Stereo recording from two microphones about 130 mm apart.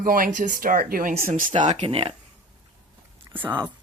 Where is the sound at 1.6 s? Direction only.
60° right (ahead or behind).